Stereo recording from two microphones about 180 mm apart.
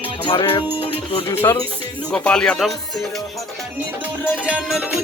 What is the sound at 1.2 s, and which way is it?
Speech, 15° left (ahead or behind).